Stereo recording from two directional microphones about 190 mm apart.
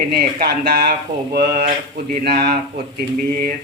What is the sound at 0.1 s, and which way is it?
Speech, 50° right (ahead or behind).